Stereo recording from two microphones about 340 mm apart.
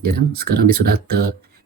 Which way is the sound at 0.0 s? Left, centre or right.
Right.